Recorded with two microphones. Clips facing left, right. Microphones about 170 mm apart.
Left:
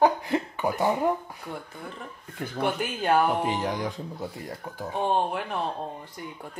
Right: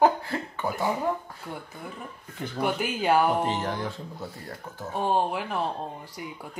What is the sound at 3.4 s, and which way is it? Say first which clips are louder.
Speech: left 1 dB; 15° left (ahead or behind).